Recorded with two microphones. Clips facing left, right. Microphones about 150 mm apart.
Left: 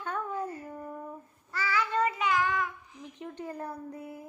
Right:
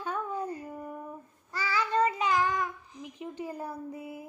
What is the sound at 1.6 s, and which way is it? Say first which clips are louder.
Child singing: right 1 dB; 35° right (ahead or behind).